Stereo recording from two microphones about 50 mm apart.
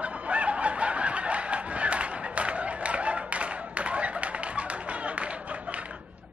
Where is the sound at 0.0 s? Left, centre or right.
Right.